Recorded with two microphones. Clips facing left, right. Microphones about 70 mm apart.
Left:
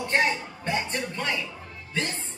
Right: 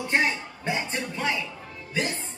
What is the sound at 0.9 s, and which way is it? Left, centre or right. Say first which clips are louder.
Music: right 1 dB; centre.